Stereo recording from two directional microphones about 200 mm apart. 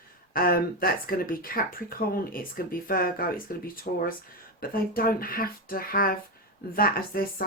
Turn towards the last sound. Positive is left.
turn(degrees=45)  # may be behind; listen again after turning